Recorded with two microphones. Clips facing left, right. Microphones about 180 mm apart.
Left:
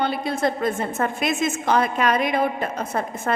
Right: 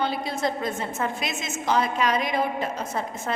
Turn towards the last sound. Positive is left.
turn(degrees=55)  # may be behind; listen again after turning